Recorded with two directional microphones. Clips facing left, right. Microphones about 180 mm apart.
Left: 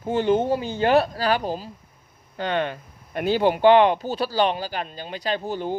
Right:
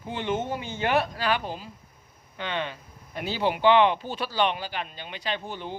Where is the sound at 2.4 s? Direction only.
50° left (ahead or behind).